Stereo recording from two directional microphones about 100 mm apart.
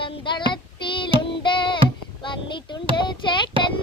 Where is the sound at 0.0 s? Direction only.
50° left (ahead or behind).